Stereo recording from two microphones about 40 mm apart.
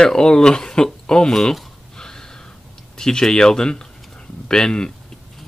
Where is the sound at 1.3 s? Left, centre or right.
Centre.